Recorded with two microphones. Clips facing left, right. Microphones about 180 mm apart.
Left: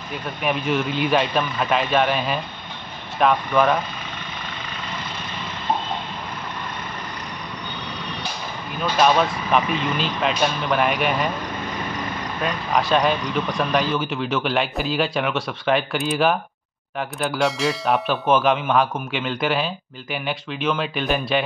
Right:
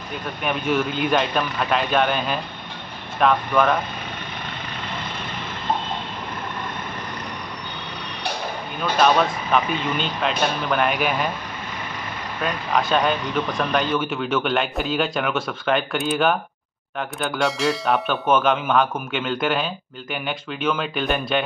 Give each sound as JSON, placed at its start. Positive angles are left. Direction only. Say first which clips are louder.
{"t": 0.4, "sound": "speech", "louder": "even", "side_deg": 0}
{"t": 8.9, "sound": "speech", "louder": "even", "side_deg": 0}
{"t": 12.4, "sound": "speech", "louder": "left 1 dB", "side_deg": 0}